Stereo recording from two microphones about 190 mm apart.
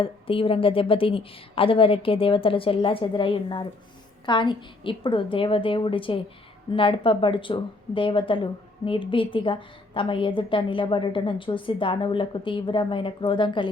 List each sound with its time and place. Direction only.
0.0 s speech: 30° left (ahead or behind)